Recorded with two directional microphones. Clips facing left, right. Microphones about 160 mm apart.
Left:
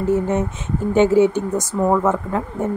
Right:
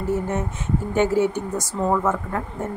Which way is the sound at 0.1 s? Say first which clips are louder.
Left 5 dB; 20° left (ahead or behind).